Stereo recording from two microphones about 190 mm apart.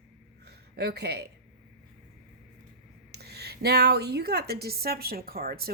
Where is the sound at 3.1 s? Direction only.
60° right (ahead or behind).